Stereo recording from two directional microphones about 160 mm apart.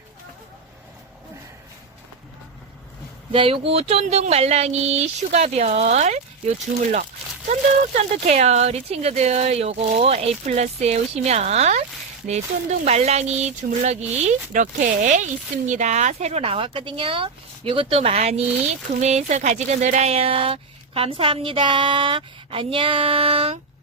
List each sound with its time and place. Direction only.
3.3 s speech: 35° right (ahead or behind)
7.9 s speech: 45° right (ahead or behind)
12.8 s speech: 45° right (ahead or behind)